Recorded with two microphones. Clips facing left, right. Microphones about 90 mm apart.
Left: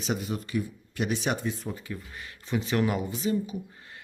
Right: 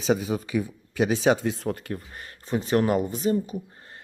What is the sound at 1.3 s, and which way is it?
Speech, 90° right.